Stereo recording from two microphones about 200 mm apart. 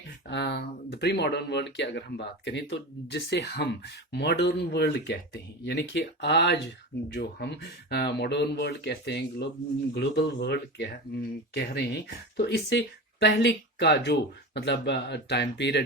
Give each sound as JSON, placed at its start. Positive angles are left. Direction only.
{"t": 0.3, "sound": "speech", "side_deg": 60}